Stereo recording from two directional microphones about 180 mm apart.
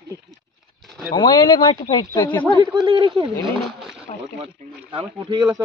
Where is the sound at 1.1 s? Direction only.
25° left (ahead or behind).